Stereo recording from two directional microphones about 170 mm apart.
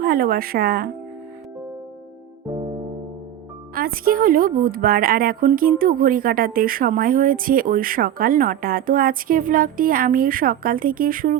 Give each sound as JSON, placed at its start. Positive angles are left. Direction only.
{"t": 0.0, "sound": "a woman's voice", "side_deg": -60}
{"t": 3.8, "sound": "a woman's voice", "side_deg": -60}